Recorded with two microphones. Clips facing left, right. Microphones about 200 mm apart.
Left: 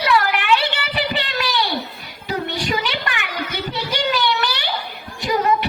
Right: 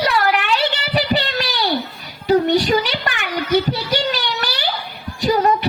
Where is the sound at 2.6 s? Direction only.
35° right (ahead or behind).